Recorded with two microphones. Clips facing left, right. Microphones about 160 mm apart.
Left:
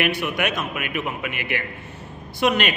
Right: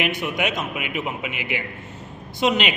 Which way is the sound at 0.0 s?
20° right (ahead or behind).